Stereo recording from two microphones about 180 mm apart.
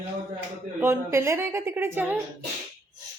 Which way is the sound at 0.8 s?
15° right (ahead or behind).